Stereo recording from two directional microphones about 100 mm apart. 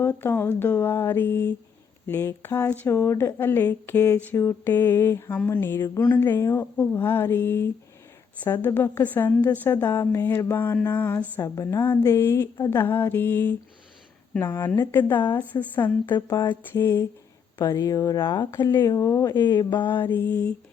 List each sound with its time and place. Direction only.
0.0 s speech: 25° left (ahead or behind)
16.3 s speech: 35° left (ahead or behind)
18.9 s speech: 35° left (ahead or behind); by 20.0 s 50° left (ahead or behind)
20.0 s speech: 20° left (ahead or behind)